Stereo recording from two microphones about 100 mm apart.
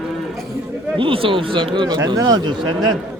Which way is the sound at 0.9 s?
60° right (ahead or behind).